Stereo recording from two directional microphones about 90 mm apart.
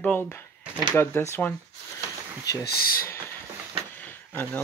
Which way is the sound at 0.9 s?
30° left (ahead or behind).